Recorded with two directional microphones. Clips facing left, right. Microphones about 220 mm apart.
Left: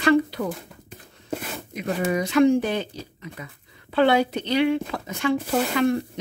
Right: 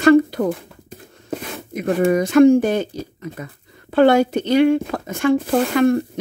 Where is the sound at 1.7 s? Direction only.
50° right (ahead or behind).